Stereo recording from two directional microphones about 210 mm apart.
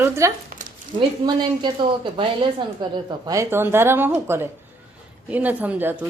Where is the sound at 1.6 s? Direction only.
20° right (ahead or behind).